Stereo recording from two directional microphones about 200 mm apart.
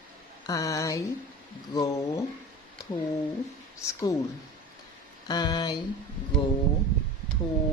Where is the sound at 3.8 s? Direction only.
15° left (ahead or behind).